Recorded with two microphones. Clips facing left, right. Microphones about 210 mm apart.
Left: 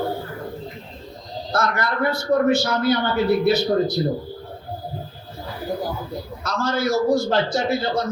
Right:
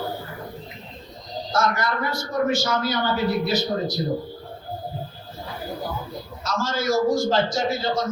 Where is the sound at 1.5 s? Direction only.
60° left (ahead or behind).